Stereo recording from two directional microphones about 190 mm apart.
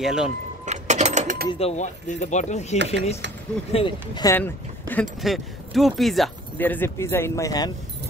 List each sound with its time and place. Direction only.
0.0 s speech: 5° right (ahead or behind)
0.7 s a sound: 35° right (ahead or behind)
1.5 s speech: 35° left (ahead or behind)
2.8 s speech: 65° right (ahead or behind)
3.7 s speech: 25° left (ahead or behind)
4.4 s speech: 10° left (ahead or behind)